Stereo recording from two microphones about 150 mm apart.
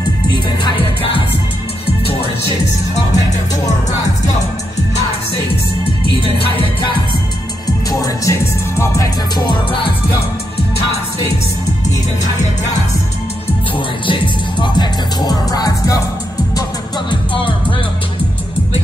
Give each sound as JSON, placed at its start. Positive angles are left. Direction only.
{"t": 7.9, "sound": "music", "side_deg": 20}
{"t": 14.0, "sound": "music", "side_deg": 35}
{"t": 17.1, "sound": "music", "side_deg": 35}